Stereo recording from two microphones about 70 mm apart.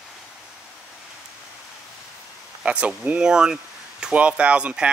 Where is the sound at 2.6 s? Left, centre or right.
Centre.